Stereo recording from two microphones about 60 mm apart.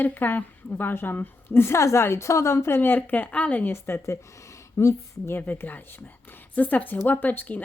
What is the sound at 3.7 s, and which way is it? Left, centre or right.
Speech, left.